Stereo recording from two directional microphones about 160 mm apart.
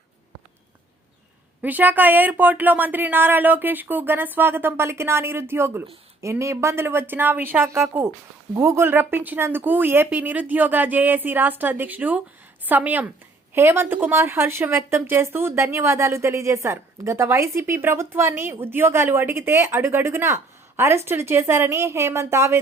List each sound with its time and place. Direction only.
1.6 s speech: 10° right (ahead or behind)